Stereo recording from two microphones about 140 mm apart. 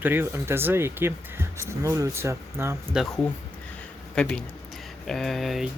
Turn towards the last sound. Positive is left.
turn(degrees=0)  # may be behind; listen again after turning